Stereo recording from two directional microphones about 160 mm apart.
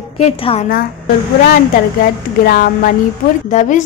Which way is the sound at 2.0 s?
60° left (ahead or behind).